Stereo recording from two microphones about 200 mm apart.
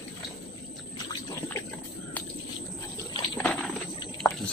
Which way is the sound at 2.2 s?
10° left (ahead or behind).